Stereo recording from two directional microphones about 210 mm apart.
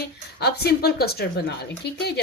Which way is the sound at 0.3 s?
50° left (ahead or behind).